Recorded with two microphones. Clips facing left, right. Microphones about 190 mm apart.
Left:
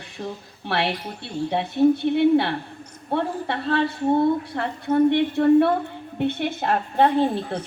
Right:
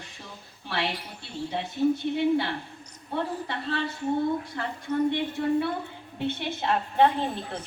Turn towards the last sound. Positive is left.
turn(degrees=40)  # may be behind; listen again after turning